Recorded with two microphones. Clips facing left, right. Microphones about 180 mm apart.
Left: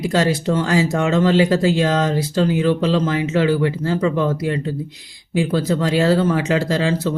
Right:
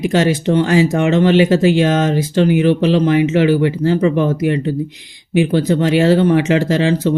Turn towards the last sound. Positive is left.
turn(degrees=-25)  # may be behind; listen again after turning